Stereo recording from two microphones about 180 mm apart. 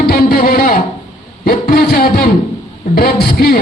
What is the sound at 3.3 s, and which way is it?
Speech, 55° left (ahead or behind).